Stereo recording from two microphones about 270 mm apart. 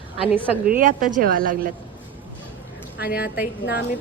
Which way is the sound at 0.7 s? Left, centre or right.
Right.